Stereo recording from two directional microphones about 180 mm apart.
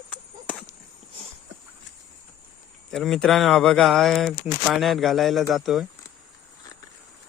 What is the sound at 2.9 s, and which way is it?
Speech, centre (ahead or behind).